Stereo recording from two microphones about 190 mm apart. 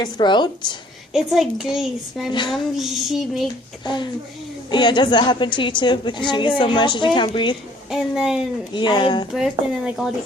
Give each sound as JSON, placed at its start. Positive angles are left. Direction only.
{"t": 0.0, "sound": "a woman's voice", "side_deg": 25}
{"t": 1.1, "sound": "a woman's voice", "side_deg": 0}
{"t": 3.8, "sound": "a woman's voice", "side_deg": 25}
{"t": 7.9, "sound": "a woman's voice", "side_deg": 0}
{"t": 8.7, "sound": "a woman's voice", "side_deg": 25}
{"t": 9.3, "sound": "a woman's voice", "side_deg": 0}